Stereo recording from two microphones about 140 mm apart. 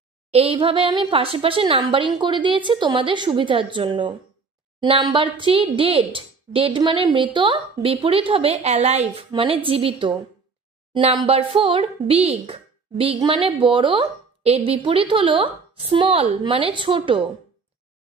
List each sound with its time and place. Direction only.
0.3 s speech: 45° right (ahead or behind)